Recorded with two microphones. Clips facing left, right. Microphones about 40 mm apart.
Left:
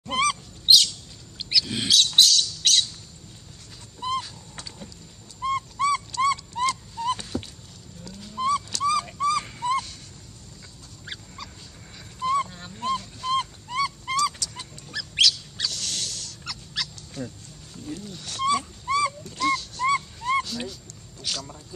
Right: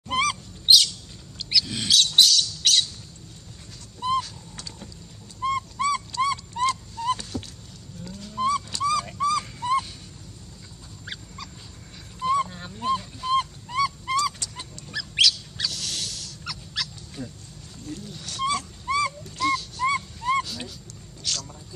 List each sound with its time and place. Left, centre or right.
0.1 s goose: centre
1.9 s squawk: centre
4.0 s a sound: centre
5.4 s dog: centre
7.0 s a sound: centre
8.2 s dog: centre
9.6 s honk: centre
12.2 s honk: centre
12.8 s dog: centre
14.4 s dog: right
14.9 s a sound: centre
18.9 s dog: centre
21.2 s a sound: centre